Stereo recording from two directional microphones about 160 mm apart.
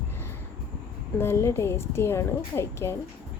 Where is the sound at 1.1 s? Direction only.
15° left (ahead or behind).